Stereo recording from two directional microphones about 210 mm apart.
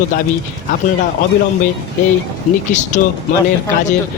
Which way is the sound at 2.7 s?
35° left (ahead or behind).